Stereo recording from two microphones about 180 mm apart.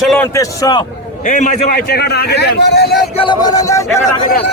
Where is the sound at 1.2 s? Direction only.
45° left (ahead or behind); by 2.9 s 65° left (ahead or behind).